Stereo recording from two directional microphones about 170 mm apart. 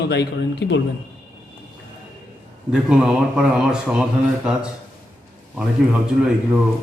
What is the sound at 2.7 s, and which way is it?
A man's voice, 5° right (ahead or behind).